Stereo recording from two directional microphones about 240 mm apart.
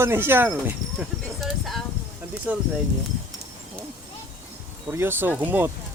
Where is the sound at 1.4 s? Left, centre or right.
Centre.